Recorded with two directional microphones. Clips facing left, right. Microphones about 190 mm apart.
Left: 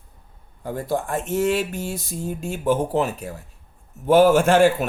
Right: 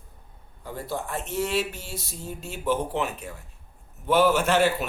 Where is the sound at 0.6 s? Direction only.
50° left (ahead or behind).